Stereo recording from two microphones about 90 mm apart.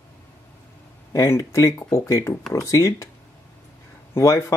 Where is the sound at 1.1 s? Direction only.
35° left (ahead or behind).